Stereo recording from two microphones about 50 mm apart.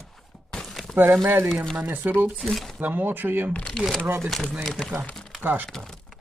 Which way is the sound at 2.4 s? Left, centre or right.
Centre.